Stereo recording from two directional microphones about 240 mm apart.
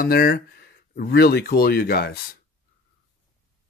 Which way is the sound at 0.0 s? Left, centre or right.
Left.